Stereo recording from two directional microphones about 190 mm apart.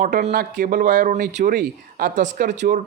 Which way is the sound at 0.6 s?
45° right (ahead or behind).